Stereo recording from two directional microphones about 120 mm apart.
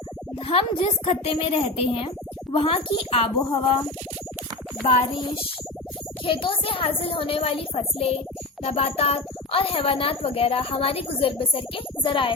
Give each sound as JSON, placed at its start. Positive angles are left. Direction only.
{"t": 0.3, "sound": "a child's voice", "side_deg": 50}
{"t": 6.2, "sound": "a child's voice", "side_deg": 45}